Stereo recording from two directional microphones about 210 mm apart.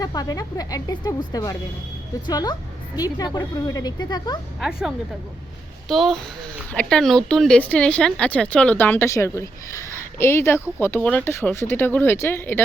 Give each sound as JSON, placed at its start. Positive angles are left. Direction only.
{"t": 0.0, "sound": "a woman's voice", "side_deg": 20}
{"t": 5.9, "sound": "a woman's voice", "side_deg": 0}